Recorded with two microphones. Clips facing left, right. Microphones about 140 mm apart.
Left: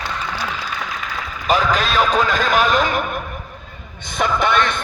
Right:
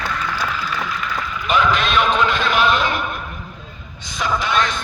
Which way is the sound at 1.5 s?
40° left (ahead or behind).